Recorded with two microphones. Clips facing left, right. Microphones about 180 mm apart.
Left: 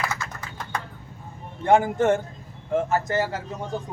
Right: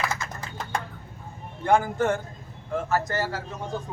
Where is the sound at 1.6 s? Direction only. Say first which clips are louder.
Left 3 dB; 20° left (ahead or behind).